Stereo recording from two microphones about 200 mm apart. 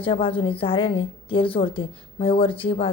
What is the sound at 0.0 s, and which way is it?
A woman's voice, 25° left (ahead or behind).